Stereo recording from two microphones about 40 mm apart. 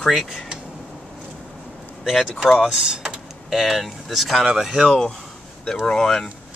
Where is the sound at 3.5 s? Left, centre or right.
Centre.